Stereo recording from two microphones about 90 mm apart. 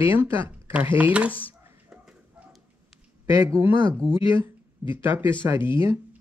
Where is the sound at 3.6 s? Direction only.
25° right (ahead or behind).